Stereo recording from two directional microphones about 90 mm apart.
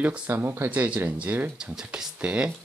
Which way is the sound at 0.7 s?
15° right (ahead or behind).